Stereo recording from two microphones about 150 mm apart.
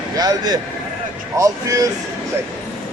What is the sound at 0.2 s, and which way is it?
Speech, 25° right (ahead or behind).